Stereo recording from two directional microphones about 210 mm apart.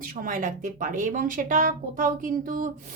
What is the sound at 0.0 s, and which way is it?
Speech, 40° right (ahead or behind).